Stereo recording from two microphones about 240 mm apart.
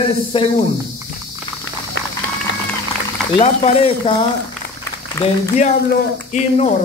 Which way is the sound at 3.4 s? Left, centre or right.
Left.